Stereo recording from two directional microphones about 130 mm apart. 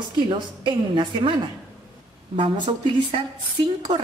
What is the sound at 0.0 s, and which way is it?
A woman's voice, 35° right (ahead or behind).